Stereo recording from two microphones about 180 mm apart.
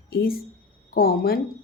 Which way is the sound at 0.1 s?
60° left (ahead or behind).